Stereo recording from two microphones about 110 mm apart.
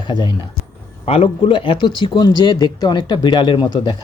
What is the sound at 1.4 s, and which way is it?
Speech, 50° left (ahead or behind).